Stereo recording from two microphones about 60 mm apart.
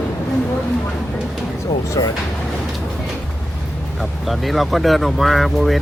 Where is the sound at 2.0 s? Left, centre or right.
Left.